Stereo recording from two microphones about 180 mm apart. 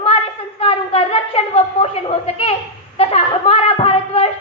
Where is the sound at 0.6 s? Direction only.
30° left (ahead or behind).